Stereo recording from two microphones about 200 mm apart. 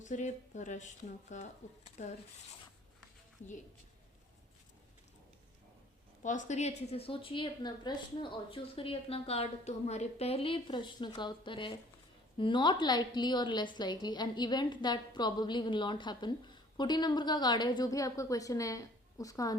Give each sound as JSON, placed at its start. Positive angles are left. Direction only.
{"t": 0.0, "sound": "a woman's voice", "side_deg": 40}
{"t": 6.2, "sound": "a woman's voice", "side_deg": 35}